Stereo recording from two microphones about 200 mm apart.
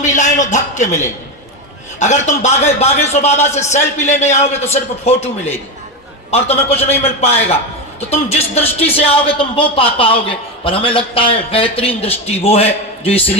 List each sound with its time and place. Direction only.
0.0 s a man's voice: 35° left (ahead or behind)